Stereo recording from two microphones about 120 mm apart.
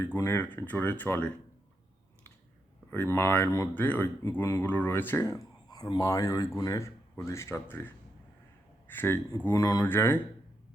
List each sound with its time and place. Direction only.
0.0 s speech: 20° left (ahead or behind)
2.9 s speech: 20° left (ahead or behind)
9.8 s speech: 20° left (ahead or behind)